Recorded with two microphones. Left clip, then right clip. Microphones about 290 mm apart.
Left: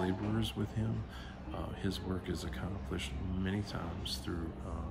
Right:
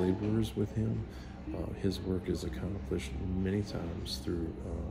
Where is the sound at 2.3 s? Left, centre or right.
Centre.